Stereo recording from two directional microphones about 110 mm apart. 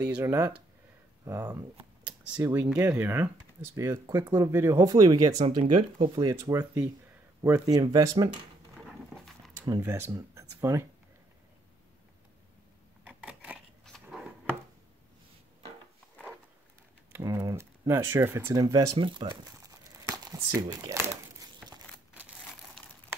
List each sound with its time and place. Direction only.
0.2 s speech: 25° right (ahead or behind)
2.4 s speech: 15° right (ahead or behind); by 5.4 s 35° right (ahead or behind)
5.5 s speech: 50° right (ahead or behind)
6.1 s speech: 35° right (ahead or behind)
8.8 s dog: centre (ahead or behind)
9.7 s speech: 25° right (ahead or behind)
13.2 s scissors: 15° right (ahead or behind)
17.2 s typing: 35° right (ahead or behind)
17.6 s speech: 25° right (ahead or behind)
18.5 s speech: 35° right (ahead or behind)
19.6 s crumpling: 30° right (ahead or behind)